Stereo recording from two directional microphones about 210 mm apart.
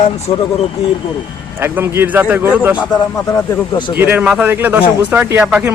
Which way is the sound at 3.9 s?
10° right (ahead or behind).